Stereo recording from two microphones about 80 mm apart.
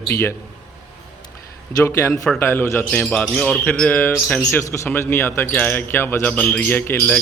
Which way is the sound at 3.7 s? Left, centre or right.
Centre.